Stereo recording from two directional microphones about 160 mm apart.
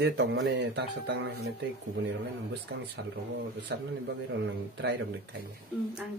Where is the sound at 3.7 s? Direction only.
90° right.